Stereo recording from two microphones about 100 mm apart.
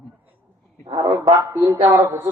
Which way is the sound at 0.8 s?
35° right (ahead or behind).